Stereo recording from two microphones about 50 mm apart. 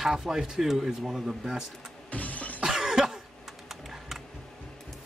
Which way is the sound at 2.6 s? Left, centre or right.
Centre.